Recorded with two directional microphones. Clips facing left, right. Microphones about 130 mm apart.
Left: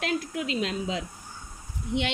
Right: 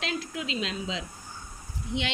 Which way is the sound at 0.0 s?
50° left (ahead or behind).